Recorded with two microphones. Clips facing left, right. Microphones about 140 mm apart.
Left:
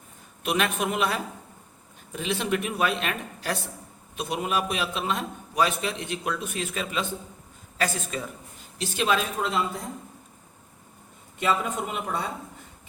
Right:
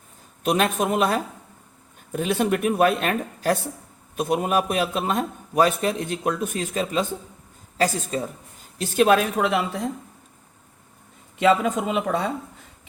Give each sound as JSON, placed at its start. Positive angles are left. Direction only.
{"t": 0.4, "sound": "a man's voice", "side_deg": -40}
{"t": 8.8, "sound": "speech", "side_deg": -45}
{"t": 11.3, "sound": "speech", "side_deg": -90}